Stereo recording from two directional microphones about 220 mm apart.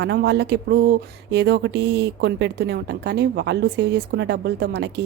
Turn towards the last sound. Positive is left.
turn(degrees=-50)  # may be behind; listen again after turning